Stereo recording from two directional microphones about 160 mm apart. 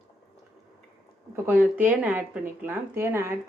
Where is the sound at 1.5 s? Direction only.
10° right (ahead or behind).